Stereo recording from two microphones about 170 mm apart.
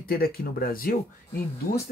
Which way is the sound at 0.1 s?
60° left (ahead or behind).